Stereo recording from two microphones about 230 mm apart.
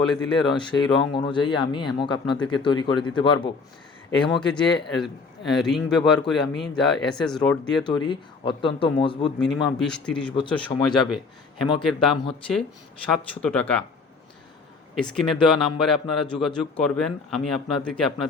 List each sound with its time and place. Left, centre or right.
0.5 s speech: centre
4.2 s speech: centre
7.9 s speech: left
9.4 s speech: centre
10.7 s speech: centre
11.6 s speech: centre
14.9 s speech: centre